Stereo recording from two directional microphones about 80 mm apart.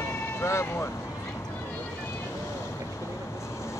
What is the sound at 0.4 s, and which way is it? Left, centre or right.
Speech, left.